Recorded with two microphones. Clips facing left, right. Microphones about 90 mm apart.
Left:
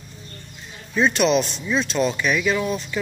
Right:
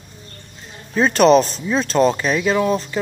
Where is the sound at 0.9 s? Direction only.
40° right (ahead or behind).